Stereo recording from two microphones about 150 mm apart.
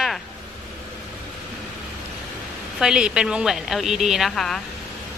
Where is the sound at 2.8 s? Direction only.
5° right (ahead or behind).